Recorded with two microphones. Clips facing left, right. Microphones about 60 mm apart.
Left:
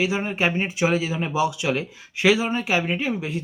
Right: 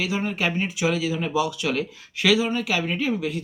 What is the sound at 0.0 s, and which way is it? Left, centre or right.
A man's voice, left.